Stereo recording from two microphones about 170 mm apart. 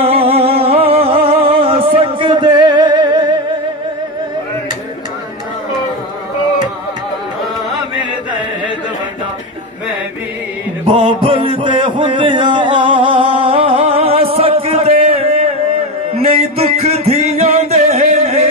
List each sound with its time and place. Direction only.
0.0 s music: 35° right (ahead or behind)
11.2 s music: 30° right (ahead or behind)
16.5 s music: 40° right (ahead or behind)